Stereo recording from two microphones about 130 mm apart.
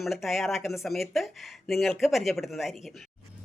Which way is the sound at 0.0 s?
Centre (ahead or behind).